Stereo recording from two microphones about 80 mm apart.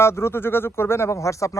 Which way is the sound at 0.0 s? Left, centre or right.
Left.